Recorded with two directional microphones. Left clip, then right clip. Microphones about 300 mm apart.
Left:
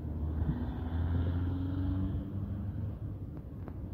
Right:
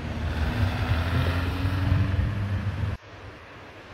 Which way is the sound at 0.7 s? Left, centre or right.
Right.